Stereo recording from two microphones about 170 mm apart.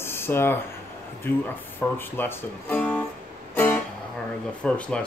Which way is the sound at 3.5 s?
10° left (ahead or behind).